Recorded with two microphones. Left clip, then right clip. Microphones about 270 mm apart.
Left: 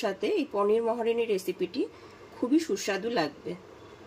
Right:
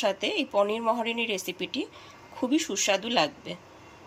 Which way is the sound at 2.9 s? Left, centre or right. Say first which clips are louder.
Right 6 dB; centre.